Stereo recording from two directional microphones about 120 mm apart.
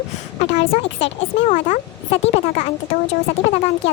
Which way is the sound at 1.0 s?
75° left (ahead or behind).